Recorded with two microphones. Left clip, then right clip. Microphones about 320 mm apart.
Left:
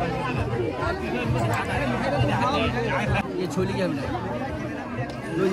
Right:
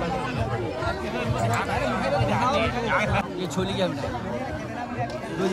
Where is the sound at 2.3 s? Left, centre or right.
Centre.